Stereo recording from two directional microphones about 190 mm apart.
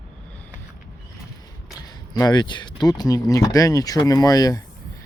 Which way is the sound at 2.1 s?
20° left (ahead or behind).